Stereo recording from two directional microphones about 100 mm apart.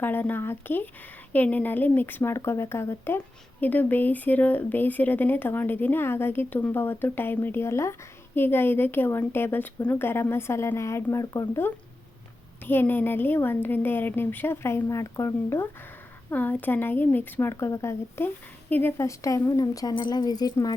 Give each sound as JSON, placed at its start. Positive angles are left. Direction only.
{"t": 0.0, "sound": "a woman's voice", "side_deg": 20}